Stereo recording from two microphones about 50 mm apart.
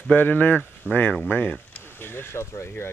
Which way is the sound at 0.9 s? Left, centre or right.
Right.